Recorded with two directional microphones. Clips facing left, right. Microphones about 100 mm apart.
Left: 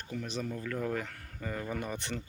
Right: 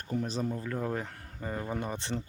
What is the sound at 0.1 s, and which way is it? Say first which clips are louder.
Speech: right 5 dB; 35° right (ahead or behind).